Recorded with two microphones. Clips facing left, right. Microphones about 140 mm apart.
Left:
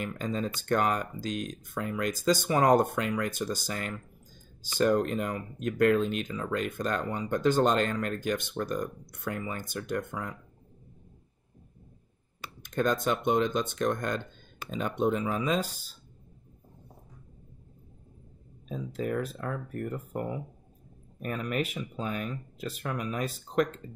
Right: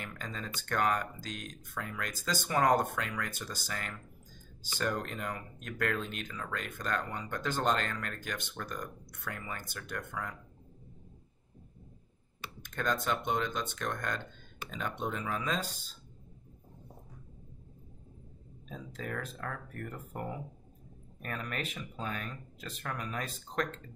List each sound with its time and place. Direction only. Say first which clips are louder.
0.0 s speech: left 10 dB; 20° left (ahead or behind)
12.6 s speech: left 6 dB; 15° left (ahead or behind)
18.7 s speech: left 9 dB; 10° left (ahead or behind)